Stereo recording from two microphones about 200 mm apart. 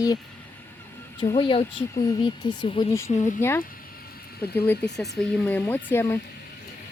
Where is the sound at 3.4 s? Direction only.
10° left (ahead or behind).